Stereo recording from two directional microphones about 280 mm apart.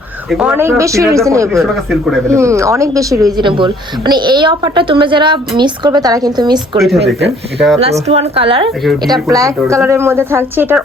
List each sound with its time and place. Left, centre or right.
0.3 s speech: centre
1.7 s speech: centre
6.7 s speech: centre
8.0 s a woman's voice: right